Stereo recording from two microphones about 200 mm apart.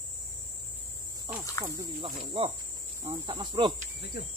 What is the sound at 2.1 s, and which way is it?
Speech, 30° right (ahead or behind).